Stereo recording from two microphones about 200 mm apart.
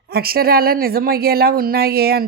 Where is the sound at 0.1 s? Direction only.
50° right (ahead or behind).